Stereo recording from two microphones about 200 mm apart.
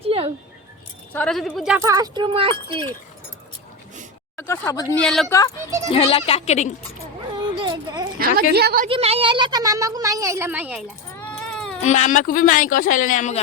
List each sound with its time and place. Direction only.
0.0 s a sound: 25° right (ahead or behind)
1.1 s a woman's voice: 5° left (ahead or behind)
1.8 s speech: 15° right (ahead or behind)
4.4 s speech: 10° left (ahead or behind)
5.0 s a woman's voice: centre (ahead or behind)
5.9 s speech: 30° left (ahead or behind)
7.3 s a sound: 20° right (ahead or behind)
8.5 s a woman's voice: 50° right (ahead or behind)
8.9 s speech: 30° right (ahead or behind); by 10.8 s 5° right (ahead or behind)
11.2 s baby cry: 5° left (ahead or behind)
11.9 s speech: 40° left (ahead or behind)